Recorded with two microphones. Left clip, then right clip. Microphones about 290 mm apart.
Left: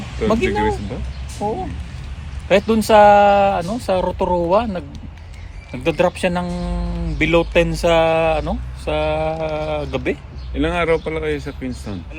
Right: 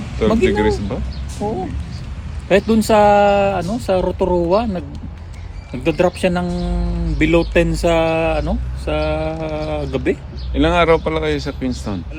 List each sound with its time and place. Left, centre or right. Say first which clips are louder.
0.2 s speech: right 2 dB; centre
1.4 s speech: even; left
10.5 s speech: right 4 dB; centre